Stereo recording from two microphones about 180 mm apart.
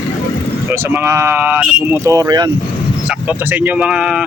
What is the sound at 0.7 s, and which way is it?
Speech, 15° right (ahead or behind).